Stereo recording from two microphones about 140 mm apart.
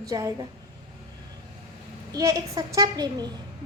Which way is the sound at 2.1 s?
25° right (ahead or behind).